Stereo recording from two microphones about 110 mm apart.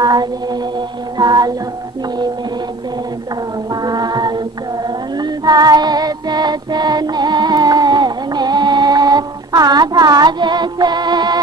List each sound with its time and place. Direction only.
0.0 s a sound: 40° right (ahead or behind)
3.7 s music: 40° right (ahead or behind)
4.8 s female singing: 40° right (ahead or behind)